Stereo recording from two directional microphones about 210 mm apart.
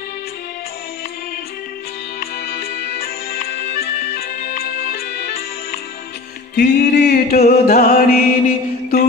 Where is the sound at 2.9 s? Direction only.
45° left (ahead or behind).